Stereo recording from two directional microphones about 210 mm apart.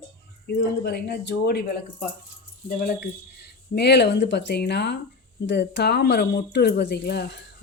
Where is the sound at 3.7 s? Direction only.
50° left (ahead or behind).